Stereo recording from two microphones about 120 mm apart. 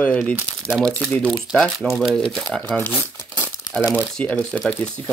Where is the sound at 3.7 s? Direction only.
10° right (ahead or behind).